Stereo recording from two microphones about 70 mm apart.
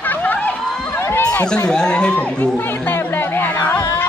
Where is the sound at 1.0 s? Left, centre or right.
Left.